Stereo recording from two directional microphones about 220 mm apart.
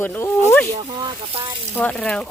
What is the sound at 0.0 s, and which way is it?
Speech, 10° left (ahead or behind).